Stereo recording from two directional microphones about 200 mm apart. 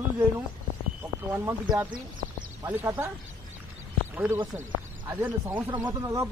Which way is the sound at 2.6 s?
10° right (ahead or behind).